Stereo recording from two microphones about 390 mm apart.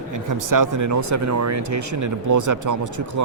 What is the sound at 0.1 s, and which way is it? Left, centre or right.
Speech, right.